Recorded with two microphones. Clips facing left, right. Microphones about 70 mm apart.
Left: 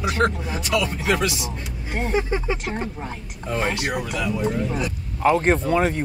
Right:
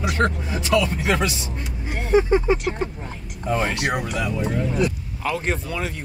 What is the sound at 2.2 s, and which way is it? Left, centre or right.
Speech, right.